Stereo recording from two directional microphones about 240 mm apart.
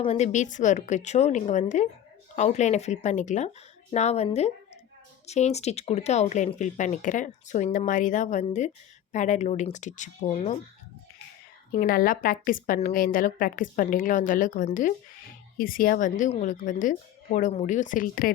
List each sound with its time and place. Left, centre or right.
0.0 s a woman's voice: left
11.7 s a woman's voice: left